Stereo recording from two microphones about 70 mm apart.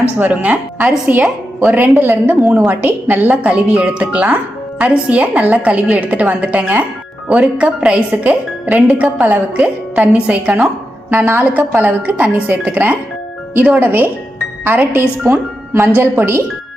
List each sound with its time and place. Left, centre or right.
0.2 s speech: right
15.3 s speech: right